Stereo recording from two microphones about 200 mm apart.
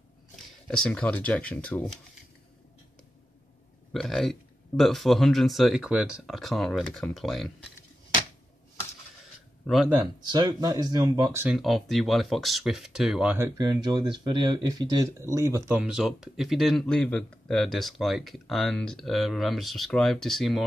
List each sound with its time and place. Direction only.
0.7 s speech: 5° left (ahead or behind)
3.9 s speech: centre (ahead or behind)
9.9 s speech: 20° right (ahead or behind)
11.5 s speech: centre (ahead or behind)